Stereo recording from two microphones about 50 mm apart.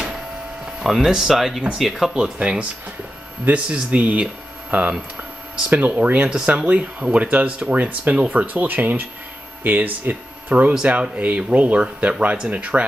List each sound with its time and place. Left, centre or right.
0.7 s speech: centre
2.1 s speech: right